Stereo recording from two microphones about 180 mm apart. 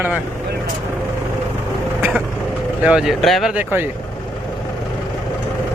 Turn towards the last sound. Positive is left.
turn(degrees=-10)  # may be behind; listen again after turning